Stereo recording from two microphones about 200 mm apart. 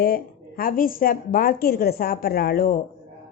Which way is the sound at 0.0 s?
50° left (ahead or behind).